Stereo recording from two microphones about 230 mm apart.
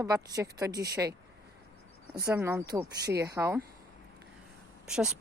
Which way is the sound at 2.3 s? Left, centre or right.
Centre.